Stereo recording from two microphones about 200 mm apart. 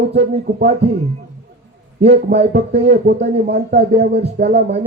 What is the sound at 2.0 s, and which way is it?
Speech, 55° right (ahead or behind).